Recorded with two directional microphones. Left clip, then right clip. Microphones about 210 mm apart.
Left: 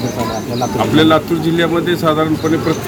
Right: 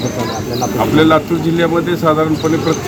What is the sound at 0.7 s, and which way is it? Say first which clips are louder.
Speech: right 1 dB; centre (ahead or behind).